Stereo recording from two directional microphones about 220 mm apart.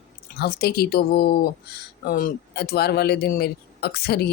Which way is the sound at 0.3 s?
45° left (ahead or behind).